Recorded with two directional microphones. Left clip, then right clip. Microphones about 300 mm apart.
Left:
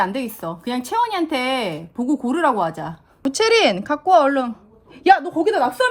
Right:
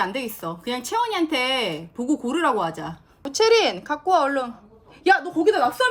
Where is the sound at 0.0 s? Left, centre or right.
Centre.